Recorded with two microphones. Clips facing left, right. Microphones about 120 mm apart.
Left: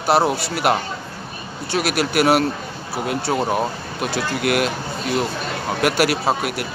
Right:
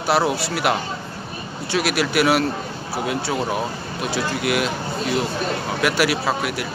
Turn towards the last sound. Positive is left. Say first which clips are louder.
# left 2 dB
turn(degrees=45)  # may be behind; listen again after turning